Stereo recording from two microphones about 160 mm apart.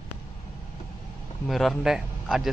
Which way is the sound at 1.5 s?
Centre (ahead or behind).